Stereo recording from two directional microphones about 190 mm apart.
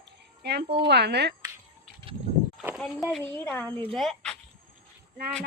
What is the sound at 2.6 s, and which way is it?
Speech, centre (ahead or behind).